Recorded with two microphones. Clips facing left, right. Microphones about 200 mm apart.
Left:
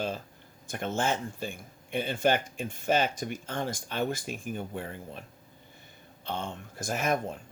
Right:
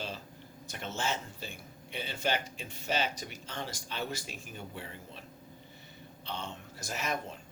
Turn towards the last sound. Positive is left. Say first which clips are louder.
# left 7 dB
turn(degrees=50)  # may be behind; listen again after turning